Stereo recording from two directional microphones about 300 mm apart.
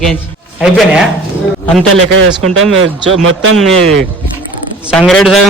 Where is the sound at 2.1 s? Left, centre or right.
Right.